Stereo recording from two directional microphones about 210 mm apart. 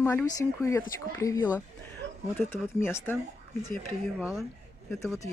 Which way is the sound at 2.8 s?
10° left (ahead or behind).